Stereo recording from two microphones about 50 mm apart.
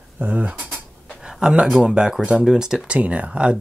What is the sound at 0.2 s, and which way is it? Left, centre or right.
Speech, right.